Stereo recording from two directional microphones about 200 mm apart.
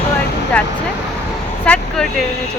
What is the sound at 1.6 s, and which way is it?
Vehicle, 5° left (ahead or behind).